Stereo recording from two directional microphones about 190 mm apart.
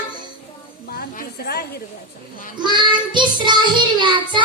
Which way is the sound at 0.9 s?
50° left (ahead or behind).